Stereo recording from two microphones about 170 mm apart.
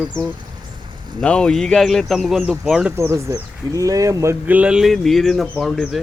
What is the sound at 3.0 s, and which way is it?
Speech, 15° right (ahead or behind).